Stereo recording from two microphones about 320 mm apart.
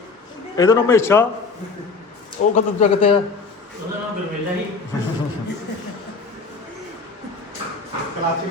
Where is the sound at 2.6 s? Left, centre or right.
Left.